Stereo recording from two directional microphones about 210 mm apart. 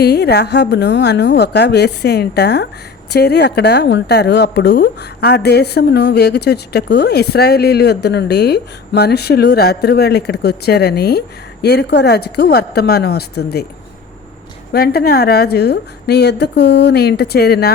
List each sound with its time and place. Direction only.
0.0 s a woman's voice: 50° left (ahead or behind)
14.7 s a woman's voice: 45° left (ahead or behind)